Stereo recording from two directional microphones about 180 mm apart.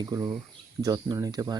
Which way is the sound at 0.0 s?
20° right (ahead or behind).